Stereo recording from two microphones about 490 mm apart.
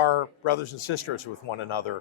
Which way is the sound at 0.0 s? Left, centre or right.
Left.